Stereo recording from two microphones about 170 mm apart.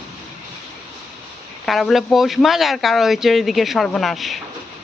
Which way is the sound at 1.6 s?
Centre (ahead or behind).